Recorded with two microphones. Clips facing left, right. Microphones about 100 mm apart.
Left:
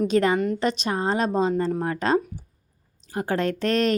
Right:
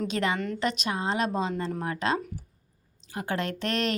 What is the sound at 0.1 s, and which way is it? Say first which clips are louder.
A woman's voice: left 8 dB; 40° left (ahead or behind).